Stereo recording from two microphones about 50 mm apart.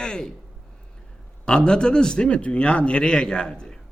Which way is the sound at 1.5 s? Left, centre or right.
Centre.